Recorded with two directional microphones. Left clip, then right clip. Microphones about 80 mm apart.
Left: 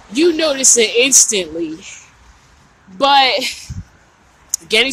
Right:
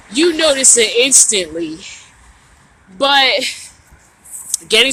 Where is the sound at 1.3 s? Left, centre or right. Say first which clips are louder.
Right 1 dB; left.